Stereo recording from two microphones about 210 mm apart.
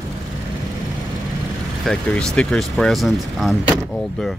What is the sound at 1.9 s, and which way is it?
Speech, 5° left (ahead or behind).